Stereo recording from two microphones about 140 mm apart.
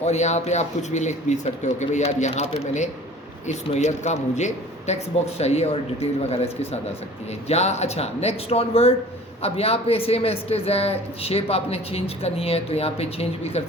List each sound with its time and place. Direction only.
0.0 s speech: 55° left (ahead or behind)